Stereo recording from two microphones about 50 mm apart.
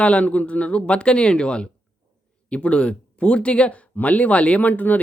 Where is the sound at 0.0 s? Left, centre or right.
Left.